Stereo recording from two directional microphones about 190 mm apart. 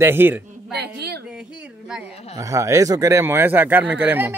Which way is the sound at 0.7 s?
60° right (ahead or behind).